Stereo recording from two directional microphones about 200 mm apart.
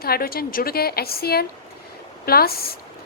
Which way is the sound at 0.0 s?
50° left (ahead or behind).